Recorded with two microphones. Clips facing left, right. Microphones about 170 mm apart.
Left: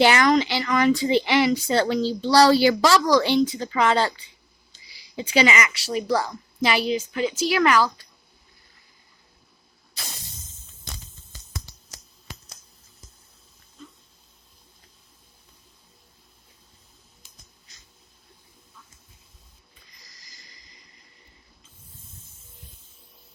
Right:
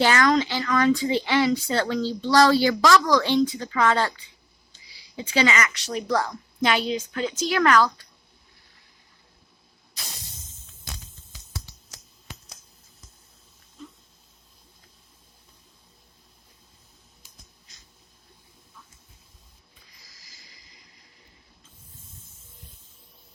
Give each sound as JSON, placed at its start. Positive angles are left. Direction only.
{"t": 0.0, "sound": "a woman's voice", "side_deg": 15}
{"t": 5.1, "sound": "a woman's voice", "side_deg": 15}
{"t": 20.1, "sound": "a sound", "side_deg": -5}